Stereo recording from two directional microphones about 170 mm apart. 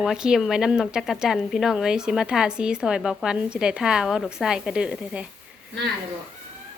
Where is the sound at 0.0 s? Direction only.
5° right (ahead or behind).